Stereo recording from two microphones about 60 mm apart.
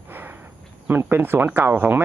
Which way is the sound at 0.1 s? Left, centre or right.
Right.